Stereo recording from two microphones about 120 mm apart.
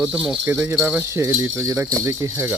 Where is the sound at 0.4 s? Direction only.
20° right (ahead or behind).